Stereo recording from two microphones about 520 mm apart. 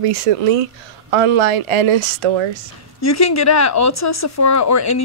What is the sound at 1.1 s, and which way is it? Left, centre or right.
Speech, right.